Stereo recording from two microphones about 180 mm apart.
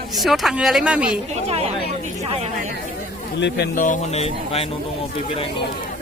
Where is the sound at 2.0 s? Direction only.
35° right (ahead or behind).